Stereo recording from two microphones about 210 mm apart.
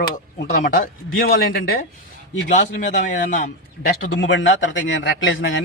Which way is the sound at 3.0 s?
40° left (ahead or behind).